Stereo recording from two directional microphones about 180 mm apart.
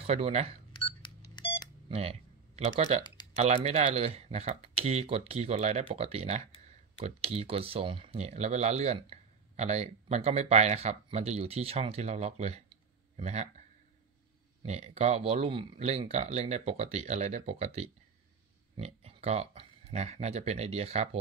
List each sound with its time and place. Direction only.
0.0 s speech: 35° right (ahead or behind)
0.7 s cash register: 30° left (ahead or behind)
1.3 s beep: 30° left (ahead or behind)
1.9 s a sound: 35° right (ahead or behind)
3.3 s speech: 35° right (ahead or behind)
14.6 s speech: 35° right (ahead or behind)